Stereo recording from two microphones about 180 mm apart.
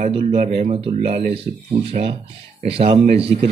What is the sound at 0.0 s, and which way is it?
Speech, 35° right (ahead or behind).